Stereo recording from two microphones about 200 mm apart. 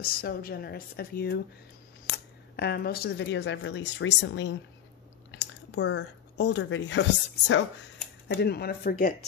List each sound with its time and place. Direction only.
0.0 s a woman's voice: 45° left (ahead or behind)